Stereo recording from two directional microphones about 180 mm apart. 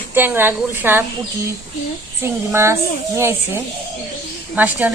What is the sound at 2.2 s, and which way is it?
Speech, 15° right (ahead or behind).